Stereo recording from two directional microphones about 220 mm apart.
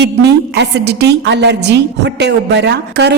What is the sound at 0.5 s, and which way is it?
A woman's voice, 50° right (ahead or behind).